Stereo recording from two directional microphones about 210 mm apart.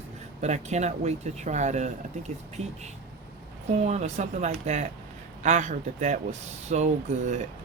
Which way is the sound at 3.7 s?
30° right (ahead or behind).